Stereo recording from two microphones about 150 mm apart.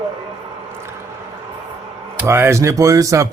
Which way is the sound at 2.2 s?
15° right (ahead or behind).